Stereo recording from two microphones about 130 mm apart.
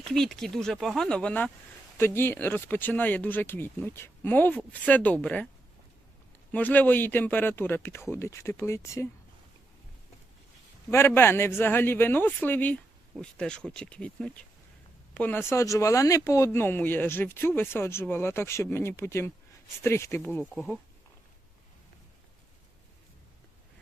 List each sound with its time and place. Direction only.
0.0 s speech: 5° left (ahead or behind)
6.5 s speech: 15° left (ahead or behind)
10.9 s speech: 15° left (ahead or behind)